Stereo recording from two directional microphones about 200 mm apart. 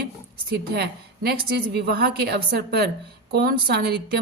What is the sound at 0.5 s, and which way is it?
A woman's voice, 50° right (ahead or behind).